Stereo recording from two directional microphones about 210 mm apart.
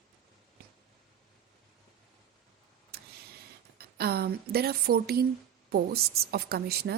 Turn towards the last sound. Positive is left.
turn(degrees=-50)  # may be behind; listen again after turning